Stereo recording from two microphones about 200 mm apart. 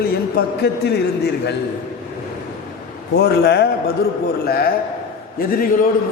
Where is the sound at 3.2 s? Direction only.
55° left (ahead or behind).